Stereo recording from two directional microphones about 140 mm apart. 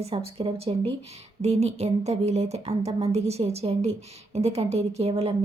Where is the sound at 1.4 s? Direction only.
50° right (ahead or behind).